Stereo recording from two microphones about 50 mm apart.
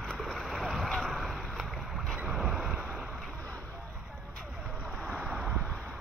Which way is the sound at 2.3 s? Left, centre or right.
Centre.